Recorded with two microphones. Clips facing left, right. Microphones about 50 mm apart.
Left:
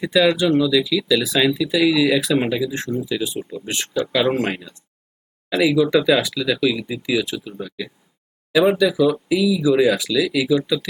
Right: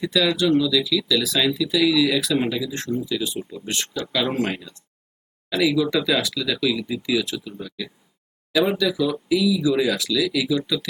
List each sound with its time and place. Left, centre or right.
0.0 s speech: centre
2.7 s speech: centre